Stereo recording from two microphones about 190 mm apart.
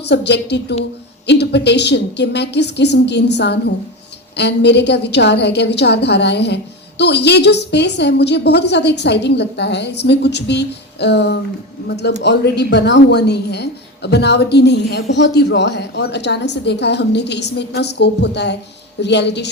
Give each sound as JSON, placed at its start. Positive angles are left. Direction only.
{"t": 0.0, "sound": "a woman's voice", "side_deg": 65}